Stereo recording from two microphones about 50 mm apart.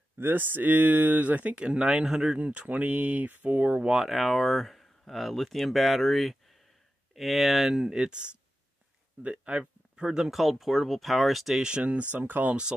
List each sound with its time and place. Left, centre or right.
0.2 s speech: right
3.9 s speech: centre; by 10.0 s right
10.0 s speech: centre
11.6 s speech: right